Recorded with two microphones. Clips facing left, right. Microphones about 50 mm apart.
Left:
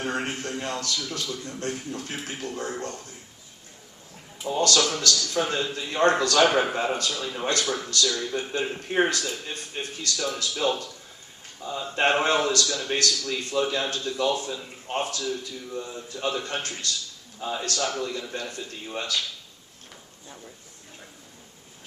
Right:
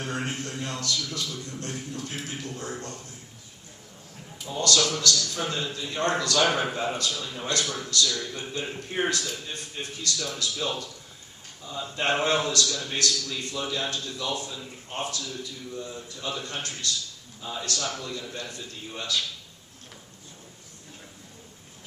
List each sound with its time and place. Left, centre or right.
0.0 s a man's voice: left
4.4 s a man's voice: left